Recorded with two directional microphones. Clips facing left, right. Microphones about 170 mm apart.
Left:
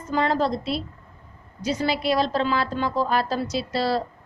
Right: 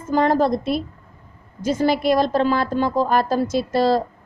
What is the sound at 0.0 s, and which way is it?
A woman's voice, 45° right (ahead or behind).